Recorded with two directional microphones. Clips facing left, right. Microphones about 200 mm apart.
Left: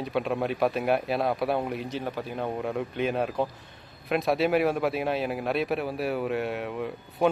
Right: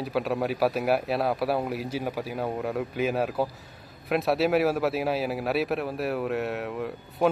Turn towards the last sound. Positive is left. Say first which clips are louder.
# even
turn(degrees=0)  # may be behind; listen again after turning